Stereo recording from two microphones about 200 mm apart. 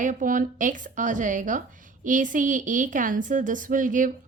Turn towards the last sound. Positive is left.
turn(degrees=-40)  # may be behind; listen again after turning